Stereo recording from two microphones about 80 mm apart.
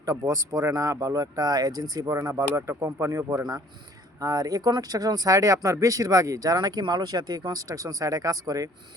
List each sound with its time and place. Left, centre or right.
0.6 s speech: right
4.2 s speech: right